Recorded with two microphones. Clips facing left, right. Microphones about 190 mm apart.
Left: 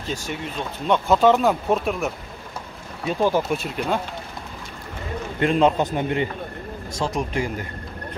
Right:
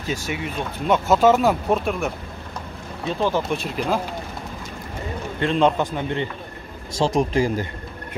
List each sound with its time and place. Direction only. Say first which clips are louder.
0.0 s speech: right 2 dB; 10° right (ahead or behind)
3.2 s speech: left 2 dB; 10° left (ahead or behind)
5.4 s a man's voice: left 1 dB; 5° left (ahead or behind)
7.2 s speech: right 7 dB; 35° right (ahead or behind)